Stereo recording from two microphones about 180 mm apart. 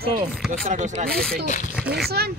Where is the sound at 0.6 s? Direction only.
40° right (ahead or behind).